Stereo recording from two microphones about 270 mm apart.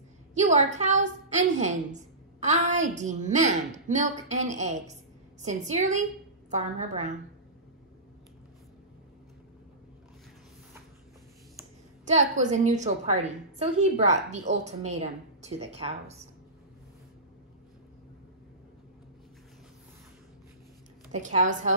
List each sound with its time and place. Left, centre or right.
0.3 s a woman's voice: right
12.0 s a woman's voice: right
21.1 s a woman's voice: right